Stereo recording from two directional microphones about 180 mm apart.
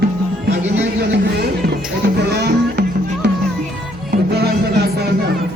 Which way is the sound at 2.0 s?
65° right (ahead or behind).